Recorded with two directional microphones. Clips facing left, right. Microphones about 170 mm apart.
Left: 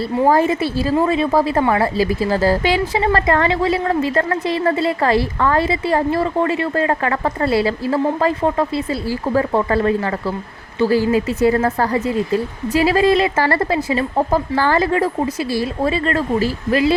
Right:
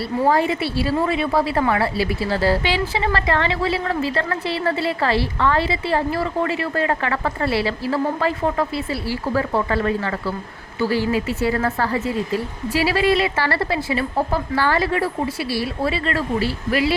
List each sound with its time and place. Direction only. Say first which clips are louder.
0.3 s a woman's voice: left 3 dB; 45° left (ahead or behind)
11.4 s a woman's voice: left 6 dB; 40° left (ahead or behind)